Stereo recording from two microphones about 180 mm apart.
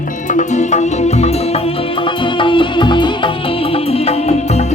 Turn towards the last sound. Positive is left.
turn(degrees=35)  # may be behind; listen again after turning